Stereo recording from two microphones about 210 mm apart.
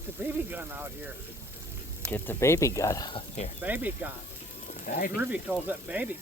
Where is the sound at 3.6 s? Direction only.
10° right (ahead or behind).